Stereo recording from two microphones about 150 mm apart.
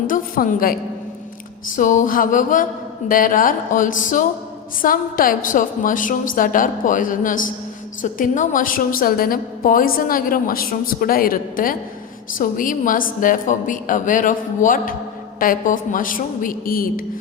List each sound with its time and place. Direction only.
0.1 s a woman's voice: 70° left (ahead or behind)
1.7 s a woman's voice: 65° left (ahead or behind)